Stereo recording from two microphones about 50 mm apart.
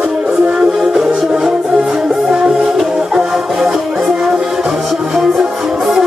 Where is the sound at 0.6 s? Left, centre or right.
Centre.